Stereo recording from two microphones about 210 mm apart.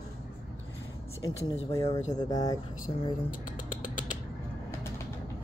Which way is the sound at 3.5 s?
40° left (ahead or behind).